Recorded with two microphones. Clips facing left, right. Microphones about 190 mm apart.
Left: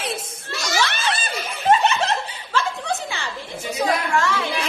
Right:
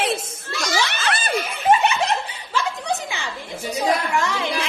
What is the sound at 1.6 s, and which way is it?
Snicker, 10° right (ahead or behind).